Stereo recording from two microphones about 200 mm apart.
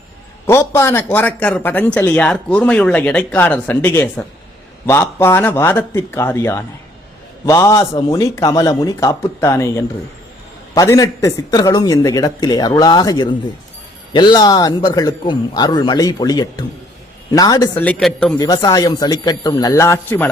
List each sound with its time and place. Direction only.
0.4 s a man's voice: 15° left (ahead or behind)
17.8 s a man's voice: 5° left (ahead or behind)
18.3 s a man's voice: 20° left (ahead or behind)